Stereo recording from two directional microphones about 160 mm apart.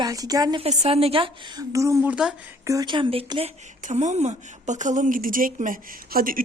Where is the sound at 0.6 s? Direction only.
40° right (ahead or behind).